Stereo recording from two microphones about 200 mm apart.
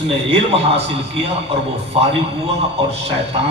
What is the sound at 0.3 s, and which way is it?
A man's voice, 30° right (ahead or behind).